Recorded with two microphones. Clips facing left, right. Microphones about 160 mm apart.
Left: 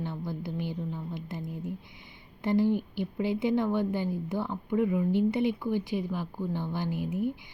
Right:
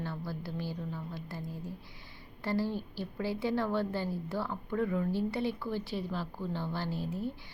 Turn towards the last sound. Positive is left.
turn(degrees=15)  # may be behind; listen again after turning